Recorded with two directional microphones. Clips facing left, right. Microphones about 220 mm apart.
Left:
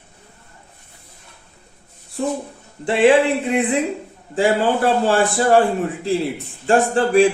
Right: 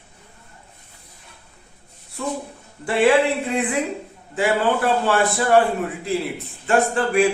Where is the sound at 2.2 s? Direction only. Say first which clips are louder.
Left 5 dB; 35° left (ahead or behind).